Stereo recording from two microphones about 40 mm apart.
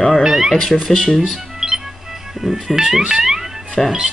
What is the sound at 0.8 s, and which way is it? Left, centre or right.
Speech, centre.